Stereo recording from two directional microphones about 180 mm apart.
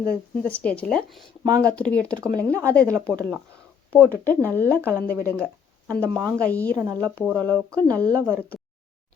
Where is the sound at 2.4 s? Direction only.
15° right (ahead or behind).